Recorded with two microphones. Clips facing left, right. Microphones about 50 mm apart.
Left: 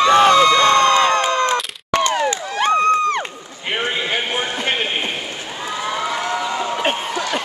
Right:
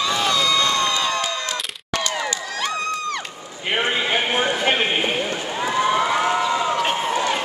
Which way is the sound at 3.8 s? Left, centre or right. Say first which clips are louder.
Right 1 dB; centre.